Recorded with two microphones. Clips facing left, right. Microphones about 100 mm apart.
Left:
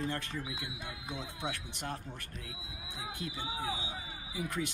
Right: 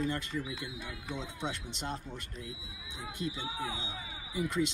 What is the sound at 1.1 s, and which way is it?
Speech, 10° left (ahead or behind).